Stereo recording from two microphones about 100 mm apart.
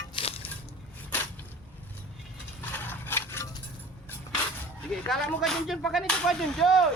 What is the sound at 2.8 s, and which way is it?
Wood, 20° left (ahead or behind).